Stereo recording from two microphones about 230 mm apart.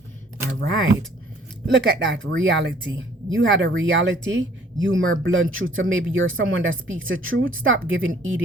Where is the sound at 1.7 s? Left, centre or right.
Right.